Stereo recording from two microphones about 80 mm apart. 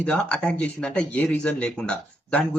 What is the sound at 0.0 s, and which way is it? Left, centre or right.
Speech, centre.